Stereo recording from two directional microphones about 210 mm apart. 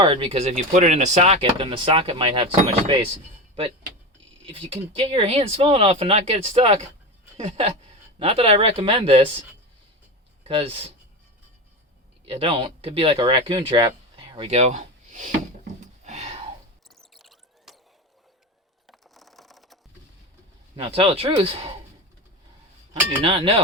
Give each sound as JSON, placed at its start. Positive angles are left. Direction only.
{"t": 0.0, "sound": "speech", "side_deg": -25}
{"t": 4.4, "sound": "speech", "side_deg": -25}
{"t": 10.4, "sound": "speech", "side_deg": -25}
{"t": 12.3, "sound": "speech", "side_deg": -25}
{"t": 15.8, "sound": "a sound", "side_deg": -35}
{"t": 16.9, "sound": "a sound", "side_deg": 0}
{"t": 18.9, "sound": "mechanisms", "side_deg": 0}
{"t": 20.7, "sound": "speech", "side_deg": -25}
{"t": 23.2, "sound": "speech", "side_deg": -25}